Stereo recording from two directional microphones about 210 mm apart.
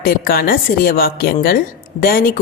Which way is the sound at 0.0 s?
45° left (ahead or behind).